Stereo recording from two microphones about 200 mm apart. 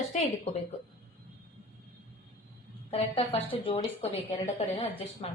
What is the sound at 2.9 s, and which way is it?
A woman's voice, 30° left (ahead or behind).